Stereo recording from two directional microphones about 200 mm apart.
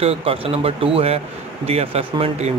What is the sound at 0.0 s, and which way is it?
Speech, 30° right (ahead or behind).